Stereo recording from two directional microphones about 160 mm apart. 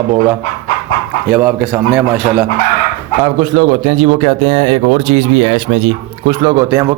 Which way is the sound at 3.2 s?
30° right (ahead or behind).